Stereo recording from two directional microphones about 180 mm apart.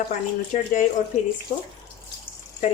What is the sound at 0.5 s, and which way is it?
Speech, 40° left (ahead or behind).